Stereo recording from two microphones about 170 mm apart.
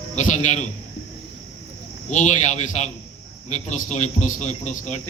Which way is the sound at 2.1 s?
45° left (ahead or behind).